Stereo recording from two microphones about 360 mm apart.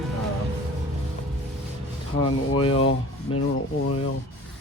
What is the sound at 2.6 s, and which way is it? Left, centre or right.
Rub, centre.